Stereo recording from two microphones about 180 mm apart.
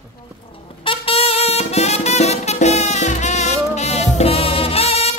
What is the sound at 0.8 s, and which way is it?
Music, 30° left (ahead or behind).